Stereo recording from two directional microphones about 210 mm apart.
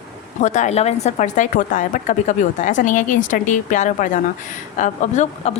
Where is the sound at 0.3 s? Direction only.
35° left (ahead or behind).